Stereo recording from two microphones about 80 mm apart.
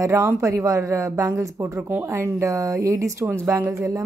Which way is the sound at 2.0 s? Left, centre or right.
Right.